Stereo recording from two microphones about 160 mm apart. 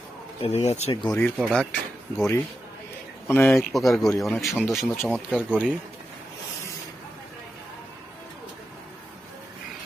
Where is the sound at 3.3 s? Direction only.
15° left (ahead or behind).